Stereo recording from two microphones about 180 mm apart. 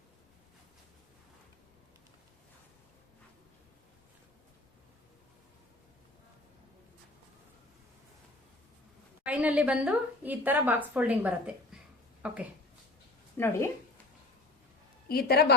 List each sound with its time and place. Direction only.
9.2 s a woman's voice: 10° right (ahead or behind)
13.3 s speech: 10° left (ahead or behind)
15.0 s a woman's voice: 60° left (ahead or behind)